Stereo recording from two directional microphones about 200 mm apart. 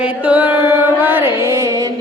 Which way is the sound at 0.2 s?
10° right (ahead or behind).